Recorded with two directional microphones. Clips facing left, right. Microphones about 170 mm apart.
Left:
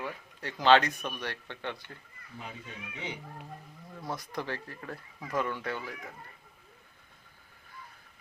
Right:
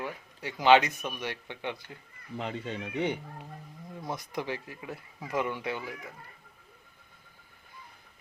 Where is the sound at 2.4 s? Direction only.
75° right (ahead or behind).